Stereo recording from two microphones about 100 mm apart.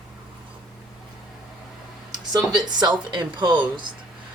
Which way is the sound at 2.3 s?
45° right (ahead or behind).